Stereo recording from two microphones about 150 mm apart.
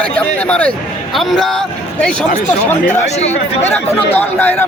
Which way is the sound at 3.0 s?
45° left (ahead or behind).